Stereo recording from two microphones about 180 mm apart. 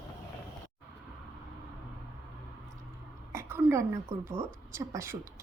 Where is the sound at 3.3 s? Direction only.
15° right (ahead or behind).